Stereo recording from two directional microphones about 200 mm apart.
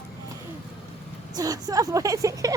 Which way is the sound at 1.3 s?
20° right (ahead or behind).